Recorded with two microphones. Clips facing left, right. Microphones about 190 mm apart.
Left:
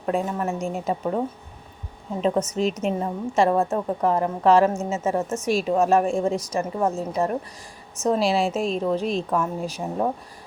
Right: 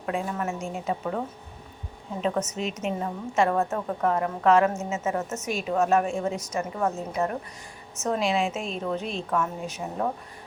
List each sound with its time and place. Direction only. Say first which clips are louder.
0.0 s a woman's voice: left 4 dB; 35° left (ahead or behind)
2.6 s a woman's voice: left 6 dB; 35° left (ahead or behind)